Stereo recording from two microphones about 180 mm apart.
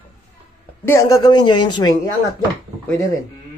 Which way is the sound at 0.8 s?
20° left (ahead or behind).